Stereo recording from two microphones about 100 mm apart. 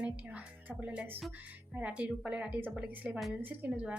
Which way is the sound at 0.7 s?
15° right (ahead or behind).